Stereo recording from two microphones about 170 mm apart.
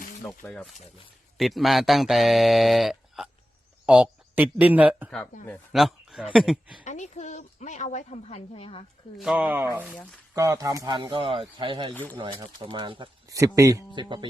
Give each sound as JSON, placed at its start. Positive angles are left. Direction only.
{"t": 0.2, "sound": "speech", "side_deg": 5}
{"t": 5.7, "sound": "a sound", "side_deg": 0}
{"t": 6.3, "sound": "speech", "side_deg": -5}
{"t": 6.8, "sound": "a woman's voice", "side_deg": 45}
{"t": 9.1, "sound": "speech", "side_deg": -5}